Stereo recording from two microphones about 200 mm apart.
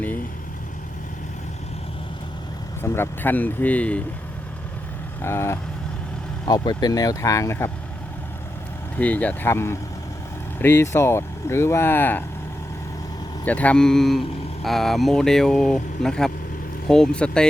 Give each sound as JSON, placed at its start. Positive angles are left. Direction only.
{"t": 2.8, "sound": "speech", "side_deg": 10}
{"t": 5.2, "sound": "speech", "side_deg": 15}
{"t": 9.0, "sound": "speech", "side_deg": 10}
{"t": 13.4, "sound": "speech", "side_deg": 5}